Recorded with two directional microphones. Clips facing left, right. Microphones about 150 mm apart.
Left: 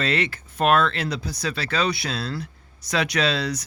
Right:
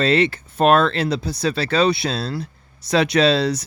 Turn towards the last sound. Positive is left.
turn(degrees=-30)  # may be behind; listen again after turning